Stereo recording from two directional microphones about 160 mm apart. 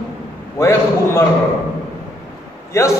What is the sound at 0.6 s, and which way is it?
Speech, 20° left (ahead or behind).